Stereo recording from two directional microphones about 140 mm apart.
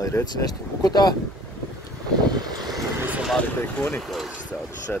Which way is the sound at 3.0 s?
10° right (ahead or behind).